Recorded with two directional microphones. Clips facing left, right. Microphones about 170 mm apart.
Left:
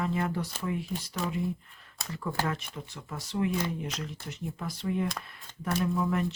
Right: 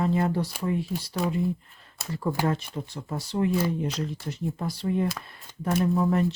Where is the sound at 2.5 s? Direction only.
35° right (ahead or behind).